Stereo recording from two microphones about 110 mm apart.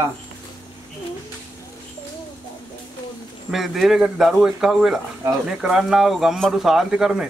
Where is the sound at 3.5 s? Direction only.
Centre (ahead or behind).